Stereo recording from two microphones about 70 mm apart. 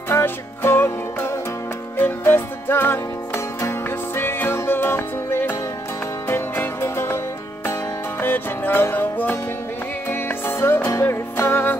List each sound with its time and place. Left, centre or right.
0.1 s music: left
8.2 s music: left